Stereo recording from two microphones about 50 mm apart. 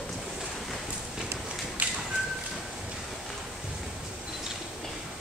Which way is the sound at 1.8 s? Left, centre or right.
Right.